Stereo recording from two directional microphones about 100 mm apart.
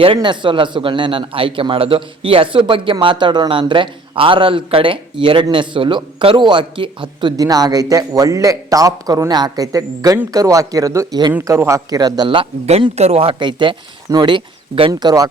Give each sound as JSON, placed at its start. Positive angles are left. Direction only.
{"t": 0.0, "sound": "speech", "side_deg": -55}
{"t": 7.3, "sound": "speech", "side_deg": -40}
{"t": 12.3, "sound": "speech", "side_deg": -75}
{"t": 13.4, "sound": "speech", "side_deg": -55}
{"t": 14.9, "sound": "speech", "side_deg": -40}